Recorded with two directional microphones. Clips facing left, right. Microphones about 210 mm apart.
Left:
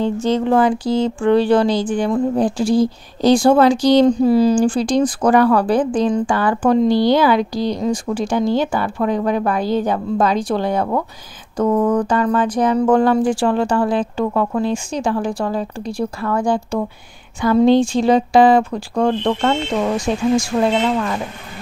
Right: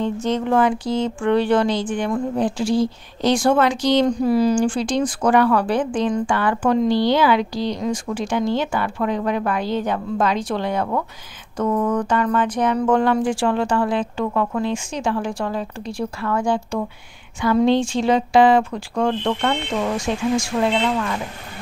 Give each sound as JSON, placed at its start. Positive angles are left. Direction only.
{"t": 0.0, "sound": "speech", "side_deg": 30}